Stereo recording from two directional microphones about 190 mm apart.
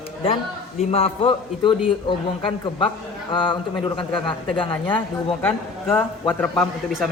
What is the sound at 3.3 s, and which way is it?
A man's voice, 25° left (ahead or behind).